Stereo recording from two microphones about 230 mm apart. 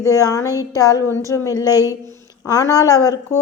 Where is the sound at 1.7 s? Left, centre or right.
Centre.